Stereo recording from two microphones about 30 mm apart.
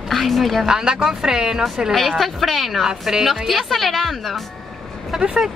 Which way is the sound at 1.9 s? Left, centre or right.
Centre.